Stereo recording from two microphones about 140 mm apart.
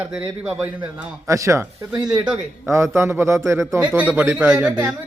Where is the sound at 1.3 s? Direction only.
20° right (ahead or behind).